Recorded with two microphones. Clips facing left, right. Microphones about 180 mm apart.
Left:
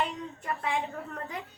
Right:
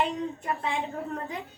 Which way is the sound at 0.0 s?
25° right (ahead or behind).